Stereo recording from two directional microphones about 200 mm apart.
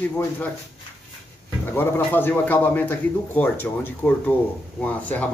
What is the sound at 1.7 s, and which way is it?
A man's voice, 10° left (ahead or behind).